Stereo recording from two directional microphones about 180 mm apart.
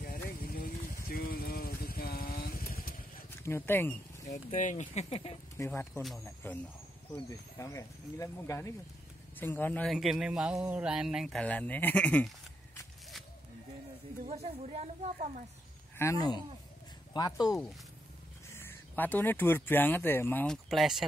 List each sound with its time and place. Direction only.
0.4 s a sound: 55° left (ahead or behind)
1.0 s vehicle: 55° left (ahead or behind)
3.4 s speech: 10° left (ahead or behind)
4.3 s speech: 45° left (ahead or behind)
5.6 s speech: 15° left (ahead or behind)
9.9 s speech: 5° right (ahead or behind)
14.2 s a sound: 35° right (ahead or behind)
16.0 s speech: 20° left (ahead or behind)
17.4 s speech: centre (ahead or behind)
18.5 s speech: 15° left (ahead or behind)
20.7 s speech: centre (ahead or behind)